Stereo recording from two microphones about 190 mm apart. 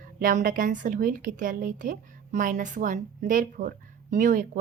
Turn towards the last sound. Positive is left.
turn(degrees=-40)  # may be behind; listen again after turning